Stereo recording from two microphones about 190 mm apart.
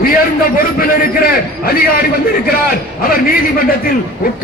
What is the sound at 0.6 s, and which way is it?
A man's voice, 50° left (ahead or behind).